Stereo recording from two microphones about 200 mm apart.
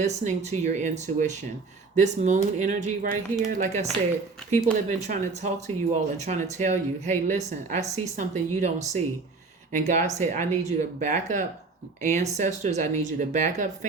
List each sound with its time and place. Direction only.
0.0 s speech: 35° right (ahead or behind)